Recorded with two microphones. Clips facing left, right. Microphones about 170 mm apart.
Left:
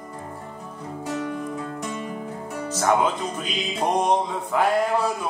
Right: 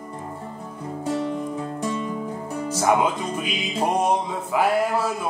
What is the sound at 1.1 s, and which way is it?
Music, 25° right (ahead or behind).